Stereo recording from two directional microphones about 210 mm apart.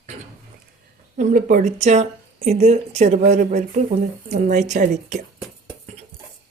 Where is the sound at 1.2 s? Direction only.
40° right (ahead or behind).